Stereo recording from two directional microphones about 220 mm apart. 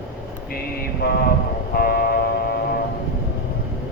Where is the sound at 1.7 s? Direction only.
45° left (ahead or behind).